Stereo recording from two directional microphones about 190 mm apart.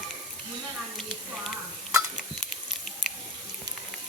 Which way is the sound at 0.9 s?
Centre (ahead or behind).